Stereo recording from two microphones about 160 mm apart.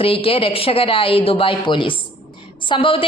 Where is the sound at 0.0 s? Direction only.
35° left (ahead or behind).